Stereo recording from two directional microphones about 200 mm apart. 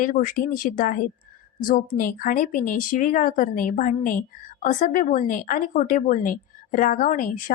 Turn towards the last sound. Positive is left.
turn(degrees=40)  # may be behind; listen again after turning